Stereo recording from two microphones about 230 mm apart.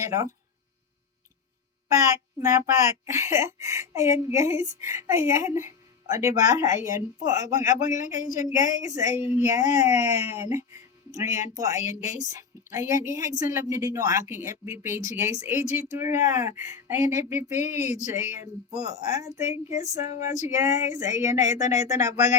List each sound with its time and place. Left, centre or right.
0.0 s speech: centre
2.0 s speech: centre
7.8 s a man's voice: left
8.4 s speech: centre
17.5 s a man's voice: left
18.9 s speech: centre
19.8 s a man's voice: left
20.5 s speech: centre